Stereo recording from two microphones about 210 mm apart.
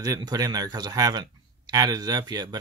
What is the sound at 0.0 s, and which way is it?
Speech, 15° right (ahead or behind).